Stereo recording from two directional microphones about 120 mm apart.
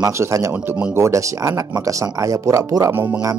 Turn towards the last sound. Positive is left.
turn(degrees=-15)  # may be behind; listen again after turning